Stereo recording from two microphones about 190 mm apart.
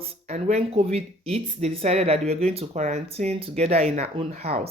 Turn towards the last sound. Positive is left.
turn(degrees=-35)  # may be behind; listen again after turning